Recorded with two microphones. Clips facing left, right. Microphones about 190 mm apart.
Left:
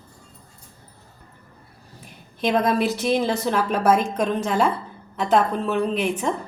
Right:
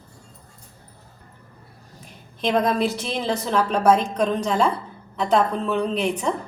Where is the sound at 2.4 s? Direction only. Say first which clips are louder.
Even; 5° left (ahead or behind).